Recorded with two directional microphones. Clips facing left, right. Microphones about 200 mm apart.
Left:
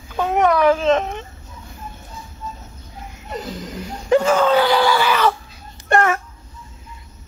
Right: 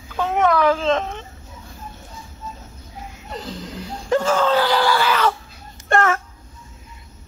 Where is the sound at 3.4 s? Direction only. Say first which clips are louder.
Left 2 dB; 15° left (ahead or behind).